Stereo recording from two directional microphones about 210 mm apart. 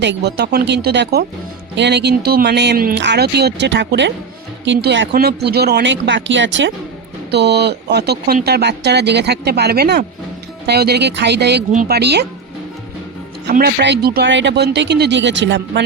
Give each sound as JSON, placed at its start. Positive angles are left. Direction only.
{"t": 0.0, "sound": "speech", "side_deg": -55}
{"t": 13.5, "sound": "speech", "side_deg": -45}